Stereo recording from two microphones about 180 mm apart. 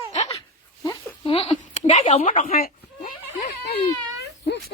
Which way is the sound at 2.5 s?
50° left (ahead or behind).